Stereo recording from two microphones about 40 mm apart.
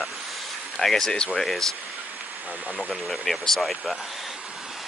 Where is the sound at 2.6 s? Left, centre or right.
Centre.